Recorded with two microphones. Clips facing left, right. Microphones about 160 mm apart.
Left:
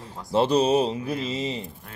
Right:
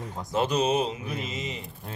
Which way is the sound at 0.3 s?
30° left (ahead or behind).